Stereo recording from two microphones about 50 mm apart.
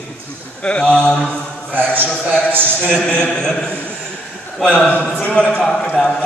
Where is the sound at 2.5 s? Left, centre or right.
Right.